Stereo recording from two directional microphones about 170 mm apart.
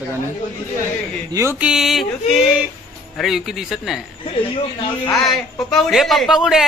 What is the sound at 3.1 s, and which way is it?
Speech, centre (ahead or behind).